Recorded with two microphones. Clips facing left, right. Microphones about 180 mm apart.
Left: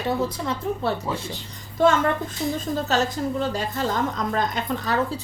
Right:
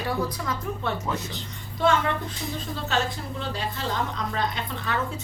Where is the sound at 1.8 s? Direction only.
45° left (ahead or behind).